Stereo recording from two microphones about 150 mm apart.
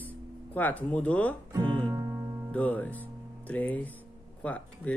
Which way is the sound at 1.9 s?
20° right (ahead or behind).